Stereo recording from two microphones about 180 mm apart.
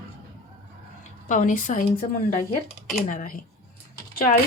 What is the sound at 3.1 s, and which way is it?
Speech, 45° left (ahead or behind).